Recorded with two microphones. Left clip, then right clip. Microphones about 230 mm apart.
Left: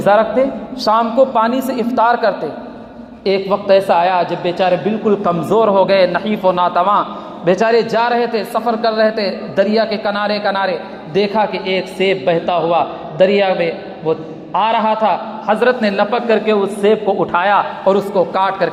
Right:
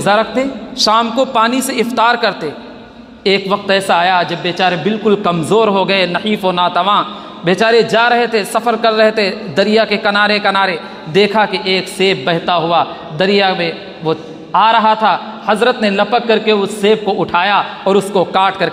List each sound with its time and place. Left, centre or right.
0.0 s a man's voice: right